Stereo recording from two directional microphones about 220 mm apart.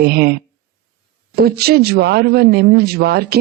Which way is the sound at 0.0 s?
45° right (ahead or behind).